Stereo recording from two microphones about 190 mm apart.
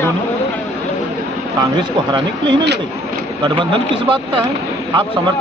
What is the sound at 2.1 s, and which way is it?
A man's voice, 25° right (ahead or behind).